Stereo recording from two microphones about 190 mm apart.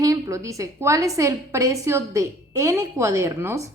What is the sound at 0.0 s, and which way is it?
A woman's voice, 15° right (ahead or behind).